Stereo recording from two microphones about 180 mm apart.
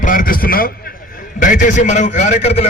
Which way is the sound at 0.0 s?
50° left (ahead or behind).